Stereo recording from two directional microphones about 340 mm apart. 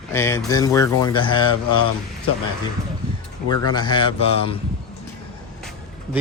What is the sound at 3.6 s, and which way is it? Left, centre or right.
Speech, centre.